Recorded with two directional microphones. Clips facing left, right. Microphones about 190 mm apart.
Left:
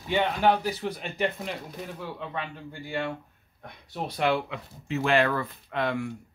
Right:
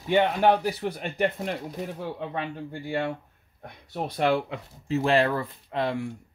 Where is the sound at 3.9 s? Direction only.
45° right (ahead or behind).